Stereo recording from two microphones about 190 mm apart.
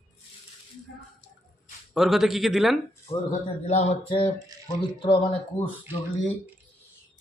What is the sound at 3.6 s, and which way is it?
Speech, 35° left (ahead or behind).